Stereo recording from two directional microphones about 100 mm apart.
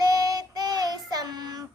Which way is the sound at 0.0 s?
40° right (ahead or behind).